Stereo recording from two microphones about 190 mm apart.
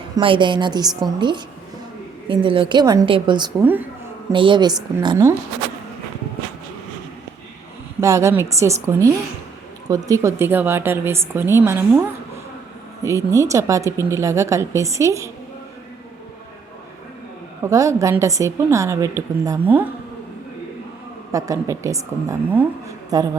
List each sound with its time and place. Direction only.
0.2 s a woman's voice: 25° right (ahead or behind)
2.2 s a woman's voice: 25° right (ahead or behind)
3.6 s speech: 10° right (ahead or behind)
4.3 s a woman's voice: 25° right (ahead or behind)
8.0 s speech: 15° right (ahead or behind)
17.6 s speech: 15° right (ahead or behind)
21.3 s a woman's voice: 15° right (ahead or behind)